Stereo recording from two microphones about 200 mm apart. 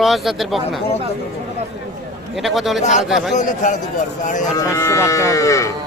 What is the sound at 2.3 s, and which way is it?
Speech, centre (ahead or behind).